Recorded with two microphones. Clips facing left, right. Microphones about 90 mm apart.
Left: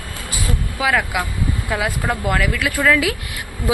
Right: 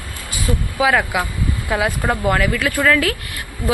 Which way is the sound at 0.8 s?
Centre (ahead or behind).